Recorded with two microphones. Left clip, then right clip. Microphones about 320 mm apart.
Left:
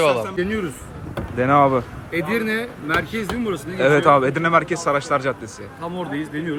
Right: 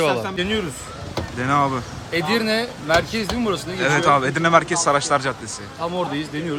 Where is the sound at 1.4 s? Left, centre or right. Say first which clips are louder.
Left 4 dB; centre.